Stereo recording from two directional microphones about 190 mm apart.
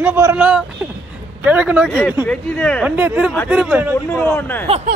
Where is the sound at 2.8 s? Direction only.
10° right (ahead or behind).